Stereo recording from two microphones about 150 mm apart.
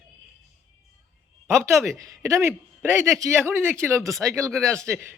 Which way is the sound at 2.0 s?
20° right (ahead or behind).